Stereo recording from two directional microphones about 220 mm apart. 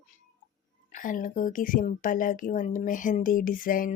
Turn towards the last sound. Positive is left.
turn(degrees=40)  # may be behind; listen again after turning